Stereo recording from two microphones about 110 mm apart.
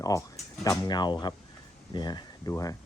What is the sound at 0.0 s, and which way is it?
Speech, 30° left (ahead or behind).